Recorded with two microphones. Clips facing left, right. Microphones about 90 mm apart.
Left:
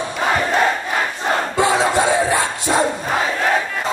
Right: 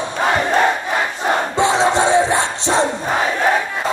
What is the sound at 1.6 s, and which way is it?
Crowd, 25° right (ahead or behind).